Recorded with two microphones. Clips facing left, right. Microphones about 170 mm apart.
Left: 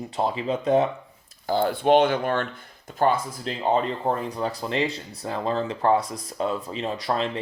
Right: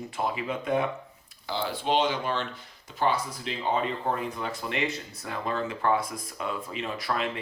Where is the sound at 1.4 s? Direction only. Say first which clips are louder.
Left 8 dB; 50° left (ahead or behind).